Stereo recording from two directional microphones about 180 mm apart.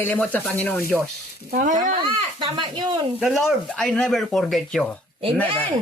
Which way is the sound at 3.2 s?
Centre (ahead or behind).